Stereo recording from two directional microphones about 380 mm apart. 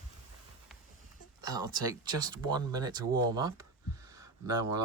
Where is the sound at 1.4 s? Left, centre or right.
Centre.